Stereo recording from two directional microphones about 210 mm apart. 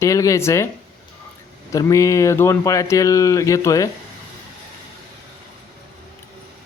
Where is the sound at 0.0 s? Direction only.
15° left (ahead or behind).